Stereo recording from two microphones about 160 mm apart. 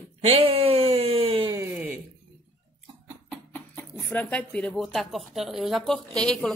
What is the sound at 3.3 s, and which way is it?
Speech, 15° left (ahead or behind).